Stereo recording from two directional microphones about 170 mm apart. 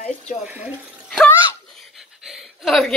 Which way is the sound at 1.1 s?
5° left (ahead or behind).